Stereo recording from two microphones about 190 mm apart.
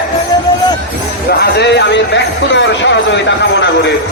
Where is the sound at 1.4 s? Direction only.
65° left (ahead or behind).